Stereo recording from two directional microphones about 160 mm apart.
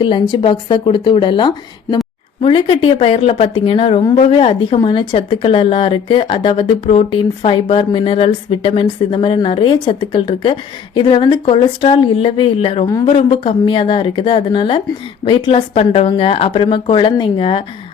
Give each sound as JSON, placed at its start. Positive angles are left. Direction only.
{"t": 0.0, "sound": "speech", "side_deg": 30}